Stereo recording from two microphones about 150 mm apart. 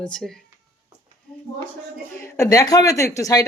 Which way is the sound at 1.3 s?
5° left (ahead or behind).